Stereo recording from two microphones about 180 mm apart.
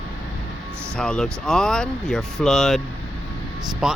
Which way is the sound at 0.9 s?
5° left (ahead or behind).